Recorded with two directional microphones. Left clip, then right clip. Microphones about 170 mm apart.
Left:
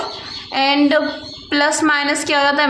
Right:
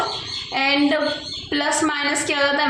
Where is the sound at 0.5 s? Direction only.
15° left (ahead or behind).